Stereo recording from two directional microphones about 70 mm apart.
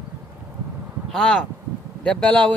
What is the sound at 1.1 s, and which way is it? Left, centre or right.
Speech, centre.